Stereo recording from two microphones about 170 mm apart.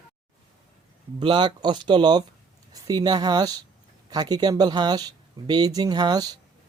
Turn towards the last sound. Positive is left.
turn(degrees=-20)  # may be behind; listen again after turning